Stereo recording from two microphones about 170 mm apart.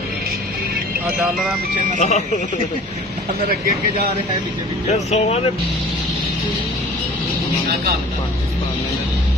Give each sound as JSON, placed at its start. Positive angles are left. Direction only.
{"t": 2.0, "sound": "speech", "side_deg": 40}
{"t": 4.9, "sound": "speech", "side_deg": 40}